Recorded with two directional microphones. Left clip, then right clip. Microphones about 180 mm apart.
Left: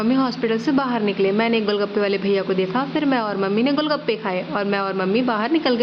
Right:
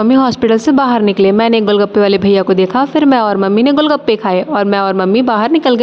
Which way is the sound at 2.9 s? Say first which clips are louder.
Right 11 dB; 55° right (ahead or behind).